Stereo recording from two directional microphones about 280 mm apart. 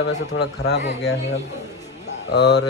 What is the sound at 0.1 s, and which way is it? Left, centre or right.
Speech, left.